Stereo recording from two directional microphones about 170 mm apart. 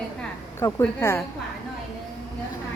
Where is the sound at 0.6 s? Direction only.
15° left (ahead or behind).